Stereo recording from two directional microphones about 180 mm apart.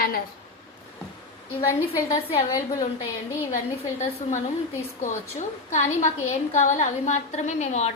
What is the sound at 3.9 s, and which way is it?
A woman's voice, 40° left (ahead or behind).